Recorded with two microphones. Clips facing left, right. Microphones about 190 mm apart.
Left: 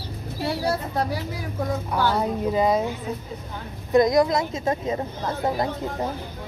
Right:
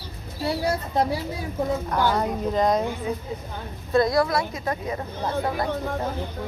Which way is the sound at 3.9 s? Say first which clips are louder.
Left 3 dB; 20° left (ahead or behind).